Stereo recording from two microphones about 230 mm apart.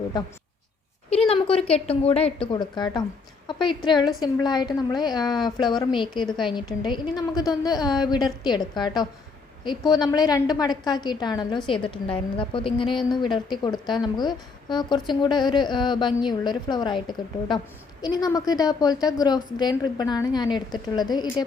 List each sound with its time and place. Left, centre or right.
0.1 s a woman's voice: centre